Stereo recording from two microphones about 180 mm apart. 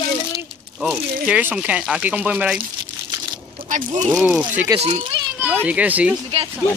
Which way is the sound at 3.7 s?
45° right (ahead or behind).